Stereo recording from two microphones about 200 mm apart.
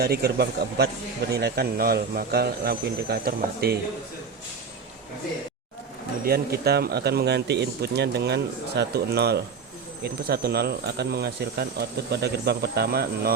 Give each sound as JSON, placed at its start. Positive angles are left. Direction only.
{"t": 0.0, "sound": "speech", "side_deg": -50}
{"t": 6.2, "sound": "speech", "side_deg": -50}